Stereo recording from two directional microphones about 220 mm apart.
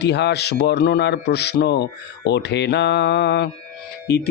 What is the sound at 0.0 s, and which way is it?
Speech, 50° left (ahead or behind).